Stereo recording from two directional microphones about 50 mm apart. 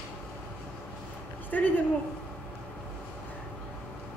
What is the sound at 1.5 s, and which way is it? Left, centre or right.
Speech, left.